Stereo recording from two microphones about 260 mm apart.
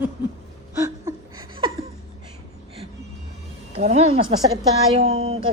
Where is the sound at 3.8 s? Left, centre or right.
Right.